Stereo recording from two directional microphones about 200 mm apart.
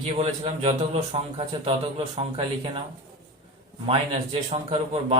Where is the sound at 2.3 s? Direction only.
25° right (ahead or behind).